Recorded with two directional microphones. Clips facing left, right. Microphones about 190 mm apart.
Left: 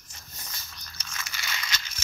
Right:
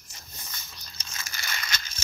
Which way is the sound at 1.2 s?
45° right (ahead or behind).